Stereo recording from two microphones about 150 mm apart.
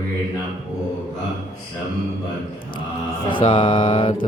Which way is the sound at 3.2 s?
35° left (ahead or behind).